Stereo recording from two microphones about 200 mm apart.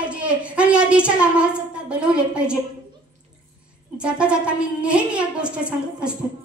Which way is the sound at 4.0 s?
5° right (ahead or behind).